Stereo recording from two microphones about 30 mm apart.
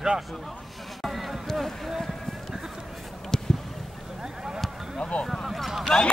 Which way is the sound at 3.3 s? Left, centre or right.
Left.